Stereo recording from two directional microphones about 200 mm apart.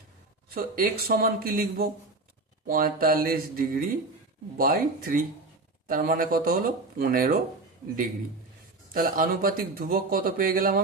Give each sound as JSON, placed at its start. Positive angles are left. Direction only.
{"t": 0.5, "sound": "a man's voice", "side_deg": -45}
{"t": 8.9, "sound": "a man's voice", "side_deg": -45}